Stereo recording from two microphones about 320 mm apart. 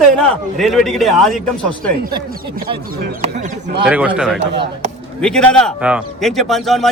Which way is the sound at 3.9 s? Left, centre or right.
Centre.